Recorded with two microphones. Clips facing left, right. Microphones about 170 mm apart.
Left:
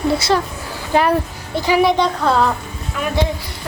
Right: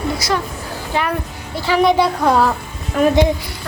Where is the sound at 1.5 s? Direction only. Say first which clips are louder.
Left 2 dB; 15° left (ahead or behind).